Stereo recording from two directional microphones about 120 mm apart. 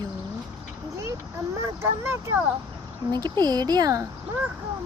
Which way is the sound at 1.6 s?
20° right (ahead or behind).